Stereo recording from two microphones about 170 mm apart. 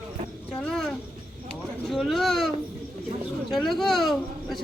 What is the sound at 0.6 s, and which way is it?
Speech, 5° left (ahead or behind).